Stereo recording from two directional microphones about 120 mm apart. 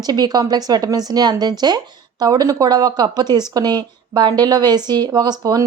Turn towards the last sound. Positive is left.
turn(degrees=-35)  # may be behind; listen again after turning